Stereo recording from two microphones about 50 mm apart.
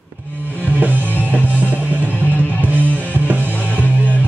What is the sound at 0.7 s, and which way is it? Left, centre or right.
Music, right.